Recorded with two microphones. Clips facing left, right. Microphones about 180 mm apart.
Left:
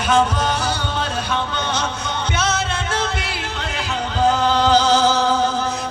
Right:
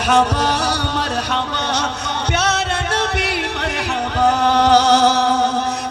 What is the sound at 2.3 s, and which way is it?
Music, 65° right (ahead or behind).